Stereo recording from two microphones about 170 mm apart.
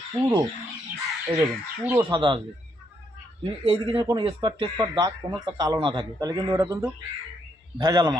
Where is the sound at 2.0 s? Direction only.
25° right (ahead or behind).